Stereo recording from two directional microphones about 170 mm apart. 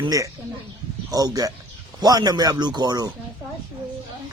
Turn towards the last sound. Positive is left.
turn(degrees=-20)  # may be behind; listen again after turning